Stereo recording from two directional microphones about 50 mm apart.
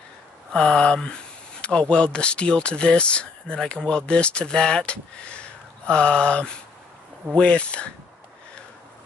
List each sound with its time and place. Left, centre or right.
0.5 s speech: centre